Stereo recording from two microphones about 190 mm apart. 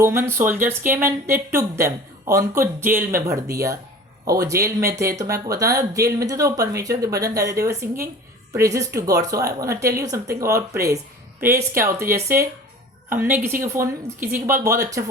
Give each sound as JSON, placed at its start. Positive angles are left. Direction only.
{"t": 0.0, "sound": "speech", "side_deg": -15}
{"t": 13.1, "sound": "speech", "side_deg": -10}